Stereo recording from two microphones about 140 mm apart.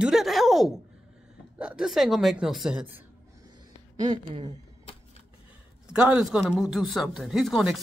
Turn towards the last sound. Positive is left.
turn(degrees=0)  # may be behind; listen again after turning